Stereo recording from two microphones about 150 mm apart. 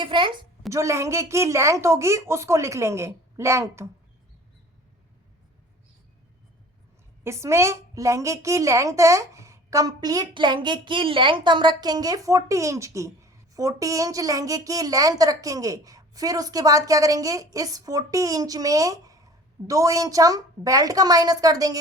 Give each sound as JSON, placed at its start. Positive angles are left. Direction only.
{"t": 0.0, "sound": "a woman's voice", "side_deg": -30}
{"t": 0.7, "sound": "a woman's voice", "side_deg": -20}
{"t": 7.3, "sound": "a woman's voice", "side_deg": -20}